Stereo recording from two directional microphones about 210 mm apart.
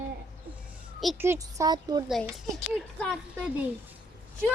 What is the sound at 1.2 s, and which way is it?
Speech, 15° right (ahead or behind).